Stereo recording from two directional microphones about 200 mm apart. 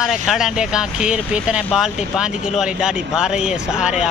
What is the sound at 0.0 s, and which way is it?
Speech, centre (ahead or behind).